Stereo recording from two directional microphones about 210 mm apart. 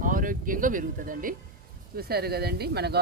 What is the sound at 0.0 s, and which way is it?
Speech, 40° right (ahead or behind).